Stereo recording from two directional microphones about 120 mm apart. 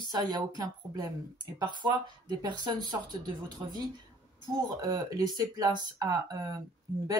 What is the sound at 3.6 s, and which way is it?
Speech, 25° right (ahead or behind).